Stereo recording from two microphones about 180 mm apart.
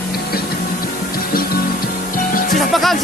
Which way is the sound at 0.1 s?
55° left (ahead or behind).